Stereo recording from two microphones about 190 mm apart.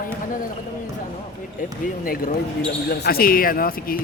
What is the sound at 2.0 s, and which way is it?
Speech, 50° left (ahead or behind).